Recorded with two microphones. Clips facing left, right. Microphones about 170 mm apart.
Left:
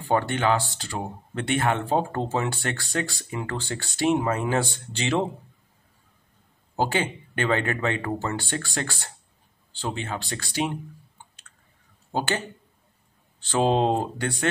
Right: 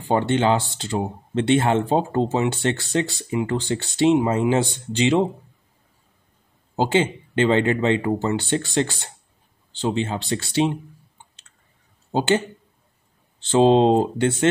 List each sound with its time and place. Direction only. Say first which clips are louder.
0.0 s speech: right 4 dB; 25° right (ahead or behind)
6.7 s speech: right 5 dB; 20° right (ahead or behind)
12.1 s speech: right 7 dB; 20° right (ahead or behind)